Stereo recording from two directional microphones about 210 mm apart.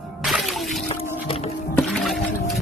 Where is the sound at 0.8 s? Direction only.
25° left (ahead or behind).